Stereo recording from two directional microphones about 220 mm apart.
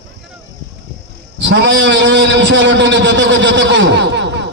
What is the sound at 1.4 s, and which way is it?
A man's voice, 50° right (ahead or behind).